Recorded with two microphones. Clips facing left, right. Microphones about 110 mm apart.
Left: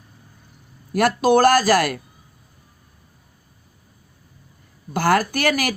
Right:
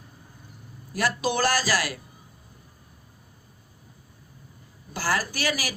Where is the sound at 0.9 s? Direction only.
55° left (ahead or behind).